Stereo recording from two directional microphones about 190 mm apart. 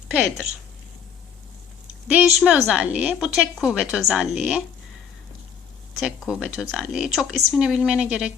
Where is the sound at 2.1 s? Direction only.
5° right (ahead or behind).